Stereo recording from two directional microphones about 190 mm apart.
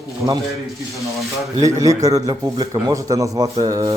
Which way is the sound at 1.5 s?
20° right (ahead or behind).